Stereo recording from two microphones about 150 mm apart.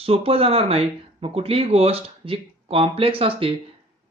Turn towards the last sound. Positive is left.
turn(degrees=-40)  # may be behind; listen again after turning